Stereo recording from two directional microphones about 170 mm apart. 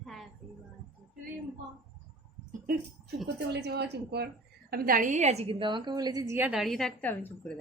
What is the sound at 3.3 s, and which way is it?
Speech, 80° right.